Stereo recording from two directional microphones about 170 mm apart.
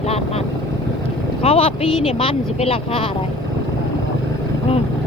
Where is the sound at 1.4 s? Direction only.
35° left (ahead or behind).